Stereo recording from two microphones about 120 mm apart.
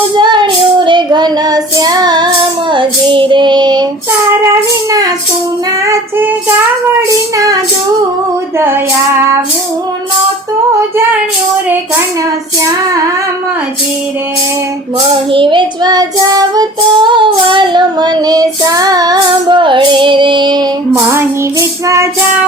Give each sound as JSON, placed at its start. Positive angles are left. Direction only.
{"t": 0.2, "sound": "child singing", "side_deg": -40}
{"t": 4.3, "sound": "child singing", "side_deg": -25}
{"t": 7.3, "sound": "female singing", "side_deg": -30}
{"t": 8.5, "sound": "child singing", "side_deg": -20}
{"t": 15.1, "sound": "child singing", "side_deg": -45}
{"t": 21.1, "sound": "child singing", "side_deg": -25}